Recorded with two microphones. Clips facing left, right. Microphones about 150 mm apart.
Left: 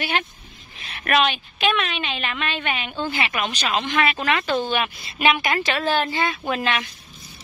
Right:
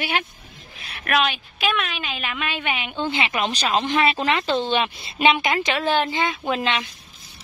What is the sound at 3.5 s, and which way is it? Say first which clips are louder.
A woman's voice: right 2 dB; 35° right (ahead or behind).